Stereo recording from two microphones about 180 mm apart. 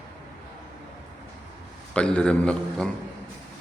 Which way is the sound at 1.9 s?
5° left (ahead or behind).